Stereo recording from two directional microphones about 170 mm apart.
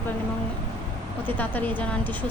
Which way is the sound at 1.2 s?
10° left (ahead or behind).